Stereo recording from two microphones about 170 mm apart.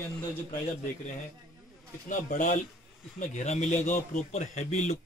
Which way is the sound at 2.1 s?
50° left (ahead or behind).